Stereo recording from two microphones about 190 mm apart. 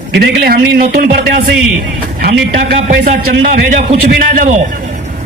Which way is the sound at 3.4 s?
45° right (ahead or behind).